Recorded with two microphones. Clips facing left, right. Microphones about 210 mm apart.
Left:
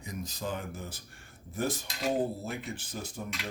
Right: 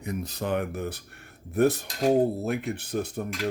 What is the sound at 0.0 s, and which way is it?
Speech, 65° right (ahead or behind).